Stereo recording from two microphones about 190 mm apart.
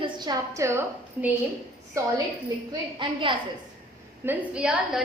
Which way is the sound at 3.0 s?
25° right (ahead or behind).